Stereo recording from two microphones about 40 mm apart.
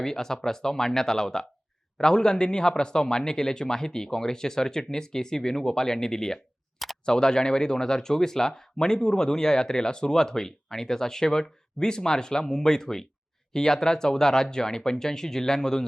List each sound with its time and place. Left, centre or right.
0.0 s speech: centre